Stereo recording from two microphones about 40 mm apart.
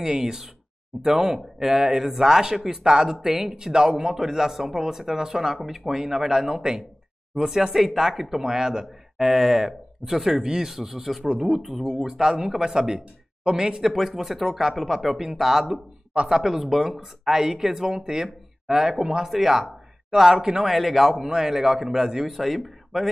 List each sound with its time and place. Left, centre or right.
0.0 s speech: centre
13.8 s speech: centre
20.7 s speech: centre